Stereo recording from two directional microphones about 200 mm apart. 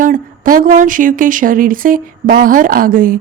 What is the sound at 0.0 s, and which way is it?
Speech, 45° right (ahead or behind).